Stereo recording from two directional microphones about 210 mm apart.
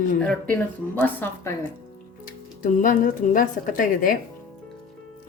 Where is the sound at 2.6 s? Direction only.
40° left (ahead or behind).